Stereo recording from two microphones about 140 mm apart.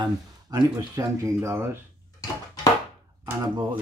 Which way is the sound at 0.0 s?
30° right (ahead or behind).